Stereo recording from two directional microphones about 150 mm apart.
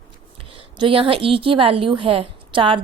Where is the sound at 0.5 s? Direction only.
35° right (ahead or behind).